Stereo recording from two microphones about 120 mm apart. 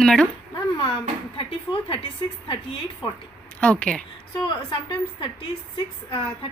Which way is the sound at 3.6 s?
10° left (ahead or behind).